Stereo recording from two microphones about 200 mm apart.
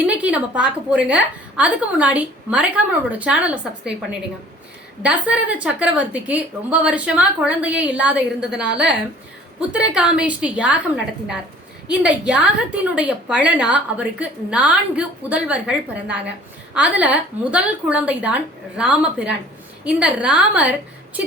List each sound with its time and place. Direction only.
0.1 s a woman's voice: 5° right (ahead or behind)
5.0 s a woman's voice: 5° right (ahead or behind)